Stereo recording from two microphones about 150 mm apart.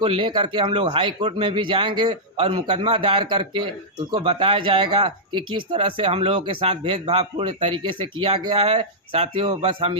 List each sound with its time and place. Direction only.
0.0 s speech: 35° right (ahead or behind)
8.5 s speech: 45° right (ahead or behind)